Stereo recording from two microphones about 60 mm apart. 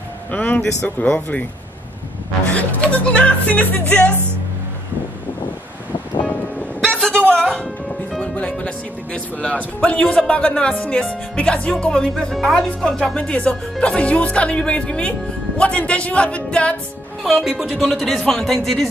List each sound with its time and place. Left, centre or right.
0.3 s speech: left
2.4 s speech: left
6.8 s a sound: centre
7.2 s music: centre
8.2 s speech: centre
17.2 s speech: centre